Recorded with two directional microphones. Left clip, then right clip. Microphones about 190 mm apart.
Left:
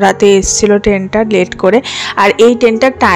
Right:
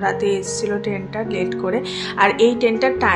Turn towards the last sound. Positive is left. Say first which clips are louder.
# left 8 dB
turn(degrees=45)  # may be behind; listen again after turning